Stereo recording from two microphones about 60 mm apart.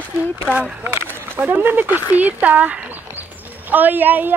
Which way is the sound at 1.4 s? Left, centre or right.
Right.